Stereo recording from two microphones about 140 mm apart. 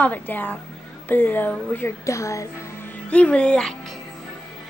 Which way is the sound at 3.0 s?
10° left (ahead or behind).